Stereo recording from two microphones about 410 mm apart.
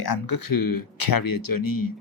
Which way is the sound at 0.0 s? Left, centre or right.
Left.